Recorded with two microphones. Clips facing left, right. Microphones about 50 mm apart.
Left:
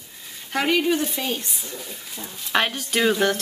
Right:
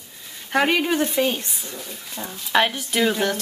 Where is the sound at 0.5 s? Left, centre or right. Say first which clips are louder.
Right 1 dB; right.